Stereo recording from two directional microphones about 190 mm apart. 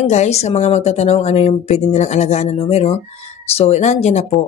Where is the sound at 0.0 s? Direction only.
35° left (ahead or behind).